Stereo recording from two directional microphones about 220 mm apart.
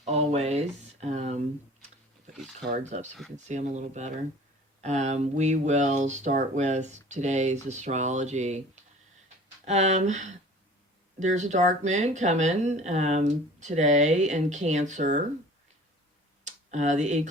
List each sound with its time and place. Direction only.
0.0 s a sound: 30° right (ahead or behind)
2.3 s speech: centre (ahead or behind)
2.6 s speech: 30° right (ahead or behind)
16.4 s tick: 35° right (ahead or behind)